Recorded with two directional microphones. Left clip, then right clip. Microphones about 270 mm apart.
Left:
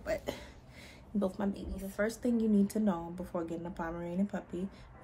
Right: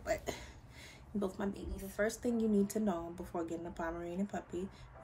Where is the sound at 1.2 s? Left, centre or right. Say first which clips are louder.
Left 4 dB; centre.